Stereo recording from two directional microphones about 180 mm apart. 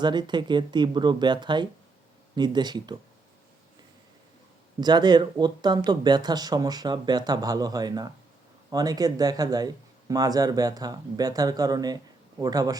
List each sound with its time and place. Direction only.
0.0 s speech: 25° right (ahead or behind)
4.8 s speech: 25° right (ahead or behind)